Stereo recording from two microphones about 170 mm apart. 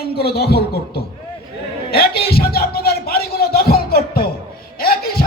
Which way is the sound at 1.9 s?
65° left (ahead or behind).